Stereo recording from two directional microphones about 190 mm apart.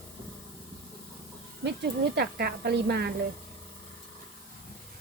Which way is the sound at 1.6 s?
60° right (ahead or behind).